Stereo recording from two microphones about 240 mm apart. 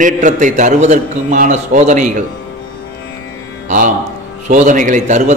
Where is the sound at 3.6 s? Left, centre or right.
Right.